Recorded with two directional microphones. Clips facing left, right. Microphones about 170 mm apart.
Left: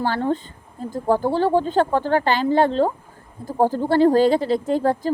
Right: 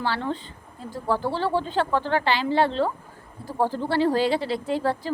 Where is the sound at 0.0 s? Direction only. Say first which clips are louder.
Left 6 dB; 45° left (ahead or behind).